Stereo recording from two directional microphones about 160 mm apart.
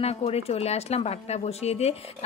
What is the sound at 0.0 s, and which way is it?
A woman's voice, 40° left (ahead or behind).